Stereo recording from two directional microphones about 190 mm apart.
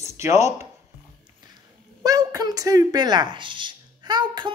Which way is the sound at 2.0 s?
20° right (ahead or behind).